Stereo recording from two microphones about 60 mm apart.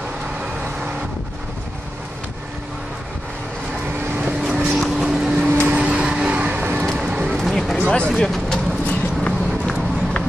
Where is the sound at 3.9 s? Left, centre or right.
Right.